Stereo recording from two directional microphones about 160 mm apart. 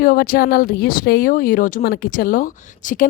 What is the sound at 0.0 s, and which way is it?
Speech, 65° left (ahead or behind).